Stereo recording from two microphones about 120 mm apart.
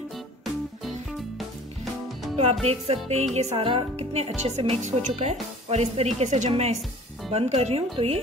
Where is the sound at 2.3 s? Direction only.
60° right (ahead or behind).